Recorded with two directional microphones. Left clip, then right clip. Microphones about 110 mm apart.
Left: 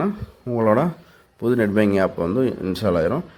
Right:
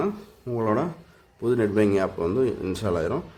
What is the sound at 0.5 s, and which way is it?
Speech, 40° left (ahead or behind).